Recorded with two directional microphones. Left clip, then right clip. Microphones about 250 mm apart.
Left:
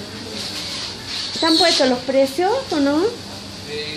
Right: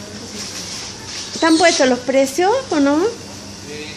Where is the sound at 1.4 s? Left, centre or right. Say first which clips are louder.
Right 3 dB; centre.